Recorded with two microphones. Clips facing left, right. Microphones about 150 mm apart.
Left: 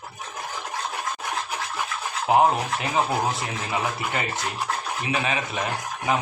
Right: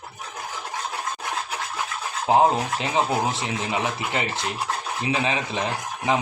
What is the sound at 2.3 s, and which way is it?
Speech, 25° right (ahead or behind).